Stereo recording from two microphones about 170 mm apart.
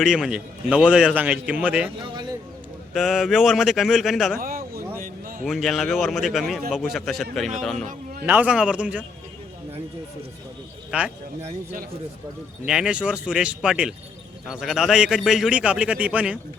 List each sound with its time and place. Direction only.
0.0 s a man's voice: 5° right (ahead or behind)
2.9 s a man's voice: centre (ahead or behind)
4.4 s speech: 55° right (ahead or behind)
5.5 s a man's voice: centre (ahead or behind)
10.9 s a man's voice: 5° right (ahead or behind)
12.6 s a man's voice: 5° right (ahead or behind)